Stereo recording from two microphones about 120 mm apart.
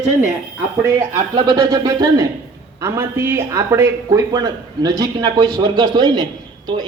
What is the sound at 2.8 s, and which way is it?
A man's voice, 20° right (ahead or behind).